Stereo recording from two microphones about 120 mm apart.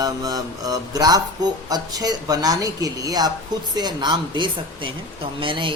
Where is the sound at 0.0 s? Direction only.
30° right (ahead or behind).